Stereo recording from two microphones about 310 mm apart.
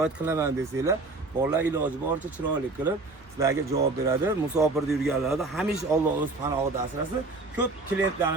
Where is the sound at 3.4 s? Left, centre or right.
Centre.